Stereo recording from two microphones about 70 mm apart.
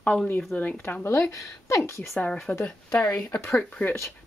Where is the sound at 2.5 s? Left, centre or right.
Left.